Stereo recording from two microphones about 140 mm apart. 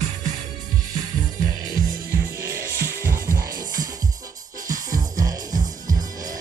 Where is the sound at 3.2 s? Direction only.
85° right.